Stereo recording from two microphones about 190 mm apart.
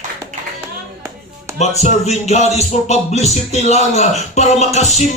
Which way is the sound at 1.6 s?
35° left (ahead or behind).